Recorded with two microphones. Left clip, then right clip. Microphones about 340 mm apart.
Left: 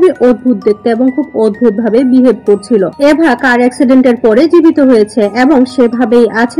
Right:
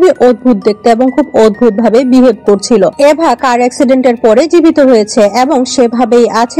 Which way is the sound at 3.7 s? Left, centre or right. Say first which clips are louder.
Even; right.